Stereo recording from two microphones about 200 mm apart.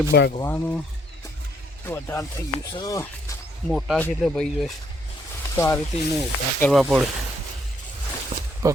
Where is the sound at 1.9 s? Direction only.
15° left (ahead or behind).